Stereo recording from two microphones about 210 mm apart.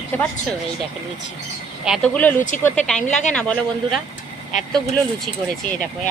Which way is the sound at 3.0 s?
35° left (ahead or behind).